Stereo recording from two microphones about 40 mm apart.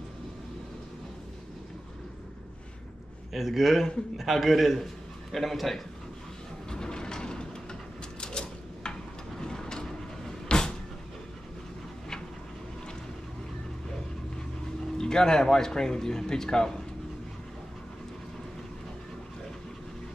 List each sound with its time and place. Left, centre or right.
3.3 s a man's voice: centre
6.7 s a sound: centre
15.0 s speech: centre